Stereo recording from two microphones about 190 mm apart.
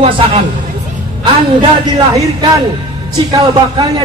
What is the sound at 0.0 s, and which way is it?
Speech, 30° right (ahead or behind).